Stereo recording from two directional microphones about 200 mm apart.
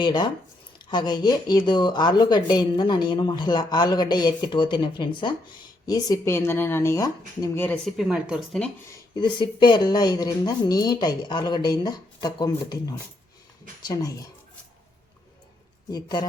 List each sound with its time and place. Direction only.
0.0 s speech: 20° left (ahead or behind); by 9.0 s 5° left (ahead or behind)
9.1 s speech: 25° left (ahead or behind)
15.9 s speech: 20° left (ahead or behind)